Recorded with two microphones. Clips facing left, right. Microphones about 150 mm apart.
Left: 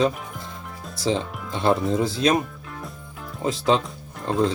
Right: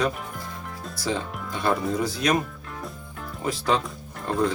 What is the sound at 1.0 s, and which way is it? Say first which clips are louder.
Speech: left 4 dB; 25° left (ahead or behind).